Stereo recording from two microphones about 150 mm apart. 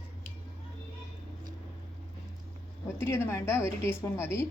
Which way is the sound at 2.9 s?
15° left (ahead or behind).